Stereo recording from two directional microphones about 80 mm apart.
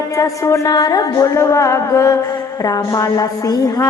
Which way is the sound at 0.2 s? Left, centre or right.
Left.